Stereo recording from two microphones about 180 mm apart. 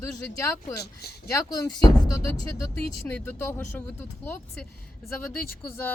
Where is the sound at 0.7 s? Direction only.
65° left (ahead or behind).